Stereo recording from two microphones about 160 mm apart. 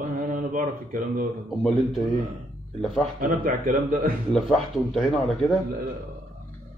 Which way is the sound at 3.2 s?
65° right (ahead or behind).